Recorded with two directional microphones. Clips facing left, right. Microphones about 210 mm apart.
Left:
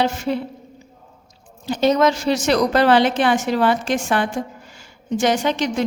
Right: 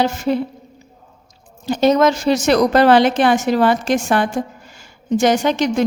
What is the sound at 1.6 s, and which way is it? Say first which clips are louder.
A woman's voice: right 3 dB; 45° right (ahead or behind).